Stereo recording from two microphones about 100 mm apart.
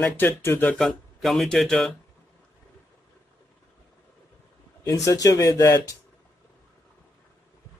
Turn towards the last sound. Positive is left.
turn(degrees=30)  # may be behind; listen again after turning